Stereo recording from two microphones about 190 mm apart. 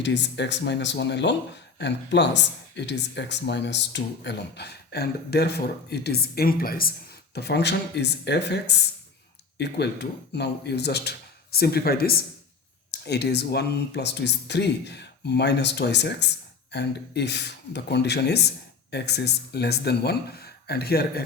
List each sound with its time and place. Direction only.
0.0 s speech: 65° left (ahead or behind); by 6.9 s 50° left (ahead or behind)
7.3 s speech: 60° left (ahead or behind)